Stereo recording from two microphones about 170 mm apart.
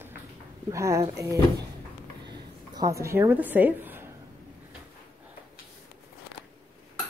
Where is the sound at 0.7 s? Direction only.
20° right (ahead or behind).